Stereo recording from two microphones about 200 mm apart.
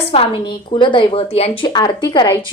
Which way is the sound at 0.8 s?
25° left (ahead or behind).